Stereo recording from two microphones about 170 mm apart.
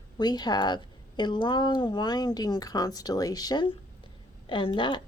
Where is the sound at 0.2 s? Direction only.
25° left (ahead or behind).